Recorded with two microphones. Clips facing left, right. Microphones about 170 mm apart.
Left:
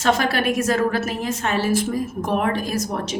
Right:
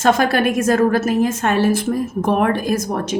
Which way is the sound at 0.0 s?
45° right (ahead or behind).